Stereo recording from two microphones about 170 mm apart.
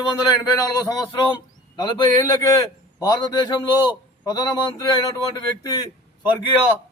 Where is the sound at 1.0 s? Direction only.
25° left (ahead or behind).